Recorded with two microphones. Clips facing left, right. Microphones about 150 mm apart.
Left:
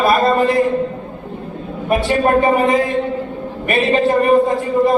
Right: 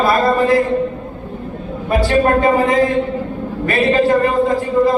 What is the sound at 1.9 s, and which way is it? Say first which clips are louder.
A man's voice: right 1 dB; 20° left (ahead or behind).